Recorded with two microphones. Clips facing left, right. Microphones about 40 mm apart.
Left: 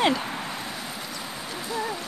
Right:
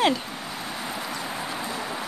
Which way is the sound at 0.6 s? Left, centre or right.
Centre.